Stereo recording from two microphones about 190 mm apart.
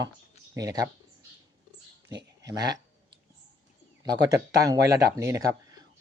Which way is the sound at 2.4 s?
20° right (ahead or behind).